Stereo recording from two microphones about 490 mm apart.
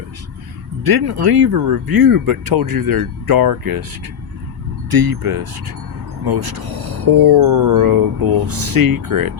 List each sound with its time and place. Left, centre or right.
0.9 s speech: right
4.9 s speech: right